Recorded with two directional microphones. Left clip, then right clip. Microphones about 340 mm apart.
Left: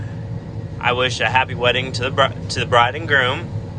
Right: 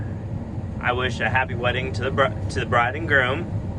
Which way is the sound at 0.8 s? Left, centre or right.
Centre.